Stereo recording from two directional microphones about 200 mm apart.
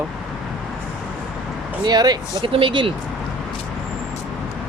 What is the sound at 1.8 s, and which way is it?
Speech, 20° right (ahead or behind).